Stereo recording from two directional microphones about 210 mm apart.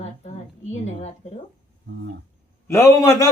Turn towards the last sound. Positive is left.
turn(degrees=15)  # may be behind; listen again after turning